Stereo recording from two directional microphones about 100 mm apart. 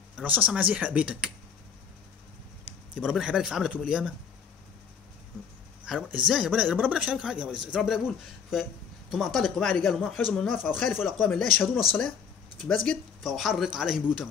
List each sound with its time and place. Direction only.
0.2 s speech: 15° right (ahead or behind)
2.9 s speech: 5° right (ahead or behind)
5.9 s speech: 5° right (ahead or behind)
6.8 s speech: 10° right (ahead or behind); by 10.6 s 5° left (ahead or behind)
10.6 s speech: 5° right (ahead or behind)
13.2 s speech: 5° right (ahead or behind)